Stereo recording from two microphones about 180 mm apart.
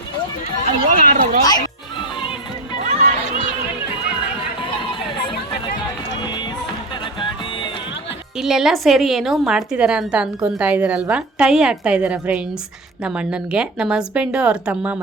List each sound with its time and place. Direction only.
0.9 s speech: 45° right (ahead or behind)
1.5 s music: 25° left (ahead or behind)
2.8 s a sound: 40° right (ahead or behind)
8.4 s a woman's voice: centre (ahead or behind)